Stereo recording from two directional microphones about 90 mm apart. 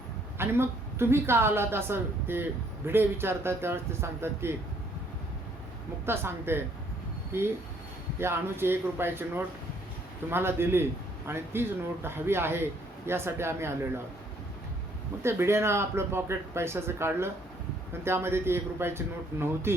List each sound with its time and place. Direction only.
0.3 s a woman's voice: 25° right (ahead or behind)
6.1 s a woman's voice: 25° right (ahead or behind)
15.2 s a woman's voice: 30° right (ahead or behind)